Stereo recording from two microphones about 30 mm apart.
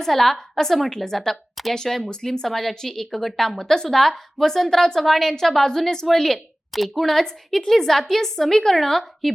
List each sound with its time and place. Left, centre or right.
0.0 s a woman's voice: centre
4.9 s a woman's voice: centre